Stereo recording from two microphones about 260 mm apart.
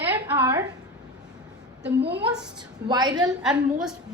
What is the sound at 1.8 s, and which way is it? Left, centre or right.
Speech, right.